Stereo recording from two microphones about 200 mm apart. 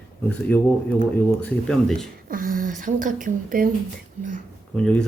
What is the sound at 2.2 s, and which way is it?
Speech, 45° right (ahead or behind).